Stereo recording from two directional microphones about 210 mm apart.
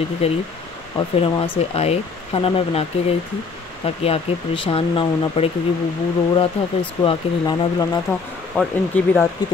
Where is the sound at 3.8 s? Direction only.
25° left (ahead or behind).